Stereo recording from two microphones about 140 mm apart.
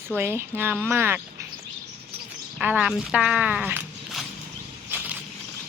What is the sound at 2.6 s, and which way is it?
A woman's voice, 10° right (ahead or behind).